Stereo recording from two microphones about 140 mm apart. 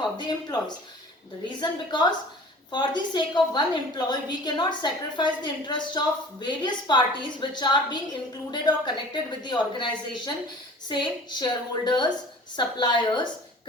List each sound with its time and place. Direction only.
0.0 s a woman's voice: 30° left (ahead or behind)